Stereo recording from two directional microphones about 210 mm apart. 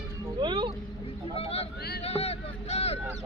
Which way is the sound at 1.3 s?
30° left (ahead or behind).